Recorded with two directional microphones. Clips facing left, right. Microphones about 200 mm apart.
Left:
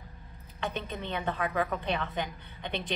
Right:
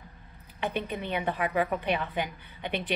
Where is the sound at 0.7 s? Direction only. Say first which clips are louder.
Right 6 dB; 10° right (ahead or behind).